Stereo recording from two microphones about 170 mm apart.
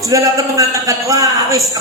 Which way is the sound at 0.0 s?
20° right (ahead or behind).